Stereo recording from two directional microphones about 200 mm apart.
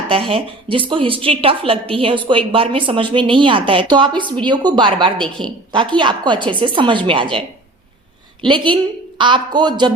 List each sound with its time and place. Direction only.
0.1 s a woman's voice: 25° right (ahead or behind)